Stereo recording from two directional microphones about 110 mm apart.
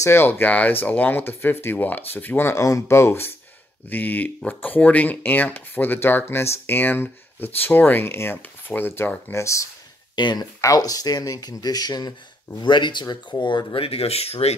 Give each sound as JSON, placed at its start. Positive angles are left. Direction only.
{"t": 0.0, "sound": "speech", "side_deg": 20}
{"t": 2.5, "sound": "speech", "side_deg": 30}
{"t": 10.1, "sound": "speech", "side_deg": 40}
{"t": 13.8, "sound": "speech", "side_deg": 65}